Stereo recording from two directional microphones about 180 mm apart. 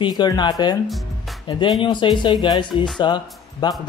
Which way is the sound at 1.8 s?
25° left (ahead or behind).